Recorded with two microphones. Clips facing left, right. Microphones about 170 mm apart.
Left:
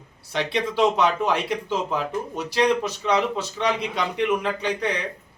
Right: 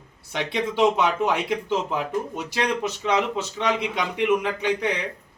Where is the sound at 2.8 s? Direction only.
15° right (ahead or behind).